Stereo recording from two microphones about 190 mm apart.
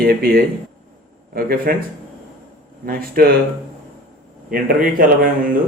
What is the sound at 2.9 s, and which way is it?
Speech, 50° right (ahead or behind).